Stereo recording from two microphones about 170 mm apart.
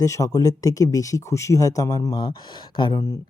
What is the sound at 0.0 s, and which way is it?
Speech, 20° left (ahead or behind).